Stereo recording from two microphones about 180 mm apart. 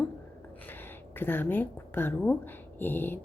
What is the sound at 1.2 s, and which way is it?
A woman's voice, 10° left (ahead or behind).